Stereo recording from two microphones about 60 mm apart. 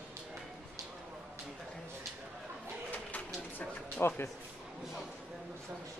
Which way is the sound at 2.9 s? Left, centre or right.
Left.